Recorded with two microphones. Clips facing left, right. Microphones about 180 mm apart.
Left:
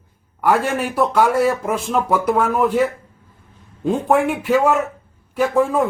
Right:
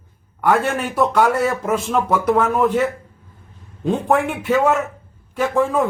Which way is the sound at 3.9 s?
5° left (ahead or behind).